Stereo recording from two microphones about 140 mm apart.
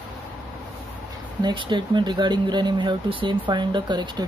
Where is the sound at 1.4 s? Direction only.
35° right (ahead or behind).